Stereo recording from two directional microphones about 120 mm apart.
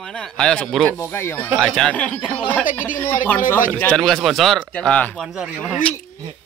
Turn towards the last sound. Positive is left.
turn(degrees=-10)  # may be behind; listen again after turning